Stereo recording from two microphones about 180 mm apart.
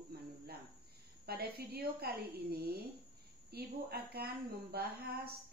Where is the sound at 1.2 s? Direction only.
55° right (ahead or behind).